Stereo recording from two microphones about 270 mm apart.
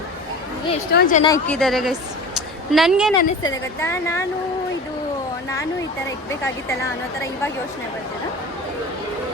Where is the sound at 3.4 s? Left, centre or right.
Centre.